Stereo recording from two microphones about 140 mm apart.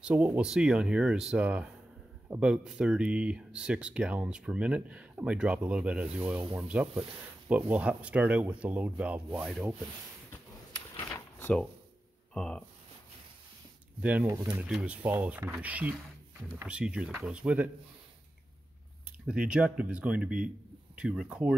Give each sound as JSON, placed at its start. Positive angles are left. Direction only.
{"t": 0.0, "sound": "speech", "side_deg": -10}
{"t": 11.1, "sound": "drawer open or close", "side_deg": 15}
{"t": 12.4, "sound": "speech", "side_deg": 5}
{"t": 14.0, "sound": "speech", "side_deg": -10}
{"t": 14.3, "sound": "speech", "side_deg": -20}
{"t": 14.6, "sound": "speech", "side_deg": -10}
{"t": 19.2, "sound": "speech", "side_deg": -5}